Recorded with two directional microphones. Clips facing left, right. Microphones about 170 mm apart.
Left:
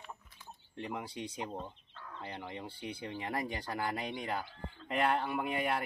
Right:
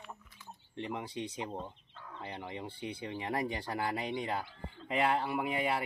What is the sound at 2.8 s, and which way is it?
Speech, 25° right (ahead or behind).